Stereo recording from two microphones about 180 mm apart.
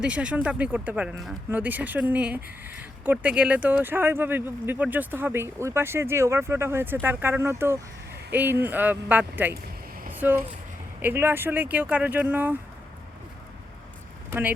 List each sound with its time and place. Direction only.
0.0 s speech: 5° right (ahead or behind)
14.3 s speech: 10° right (ahead or behind)